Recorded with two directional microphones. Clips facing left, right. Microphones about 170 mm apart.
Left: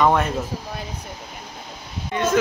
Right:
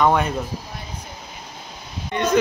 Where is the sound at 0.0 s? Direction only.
Centre (ahead or behind).